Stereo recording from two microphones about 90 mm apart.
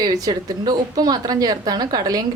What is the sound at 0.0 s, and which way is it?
A woman's voice, 50° right (ahead or behind).